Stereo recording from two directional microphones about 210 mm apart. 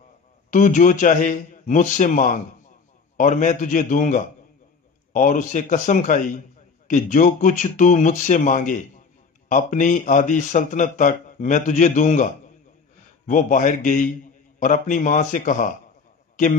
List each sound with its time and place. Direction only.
0.5 s speech: 35° left (ahead or behind)
13.3 s speech: 40° left (ahead or behind)